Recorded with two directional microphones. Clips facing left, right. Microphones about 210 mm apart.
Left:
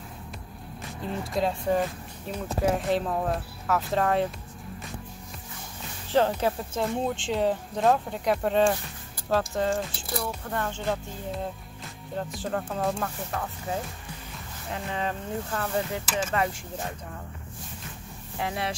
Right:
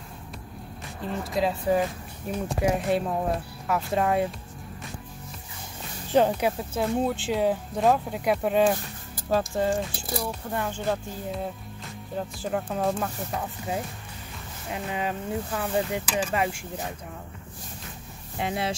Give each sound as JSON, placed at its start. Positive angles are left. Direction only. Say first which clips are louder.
{"t": 1.3, "sound": "speech", "louder": "right 2 dB", "side_deg": -5}
{"t": 6.1, "sound": "speech", "louder": "right 2 dB", "side_deg": -15}
{"t": 6.8, "sound": "speech", "louder": "right 3 dB", "side_deg": -5}
{"t": 18.4, "sound": "speech", "louder": "right 2 dB", "side_deg": -25}